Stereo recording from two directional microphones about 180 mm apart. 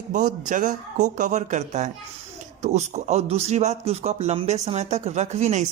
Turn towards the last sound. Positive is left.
turn(degrees=-40)  # may be behind; listen again after turning